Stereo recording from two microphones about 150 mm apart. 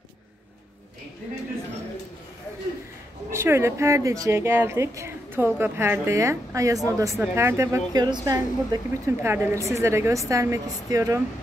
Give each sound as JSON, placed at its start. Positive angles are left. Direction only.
{"t": 3.3, "sound": "a woman's voice", "side_deg": -15}